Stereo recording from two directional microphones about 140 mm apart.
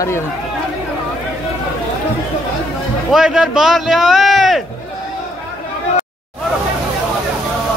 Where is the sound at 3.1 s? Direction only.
5° right (ahead or behind).